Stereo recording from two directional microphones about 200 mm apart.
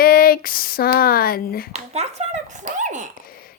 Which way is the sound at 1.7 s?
35° right (ahead or behind).